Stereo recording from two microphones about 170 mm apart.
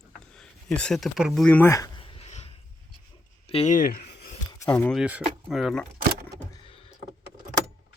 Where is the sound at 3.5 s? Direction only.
35° left (ahead or behind).